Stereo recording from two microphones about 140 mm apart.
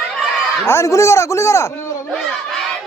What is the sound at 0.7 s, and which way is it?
Speech, 20° left (ahead or behind).